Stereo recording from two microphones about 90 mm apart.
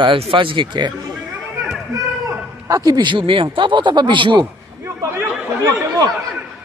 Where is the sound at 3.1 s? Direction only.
70° right (ahead or behind).